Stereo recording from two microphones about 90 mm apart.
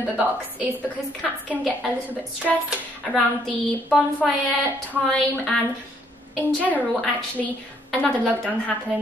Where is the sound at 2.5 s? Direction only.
10° left (ahead or behind).